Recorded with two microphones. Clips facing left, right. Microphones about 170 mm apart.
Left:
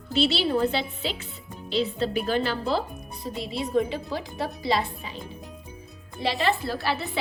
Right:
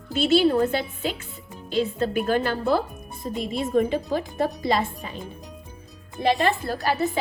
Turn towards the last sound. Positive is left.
turn(degrees=-45)  # may be behind; listen again after turning